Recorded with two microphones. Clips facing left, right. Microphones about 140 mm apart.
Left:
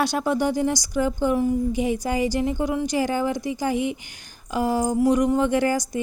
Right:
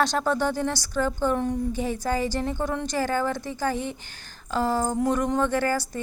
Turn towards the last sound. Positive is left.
turn(degrees=15)  # may be behind; listen again after turning